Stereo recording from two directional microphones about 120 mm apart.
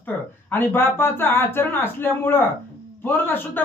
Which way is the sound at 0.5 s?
20° left (ahead or behind).